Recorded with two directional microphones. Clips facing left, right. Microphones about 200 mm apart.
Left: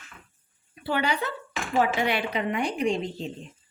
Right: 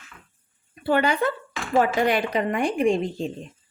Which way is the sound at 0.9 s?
50° right (ahead or behind).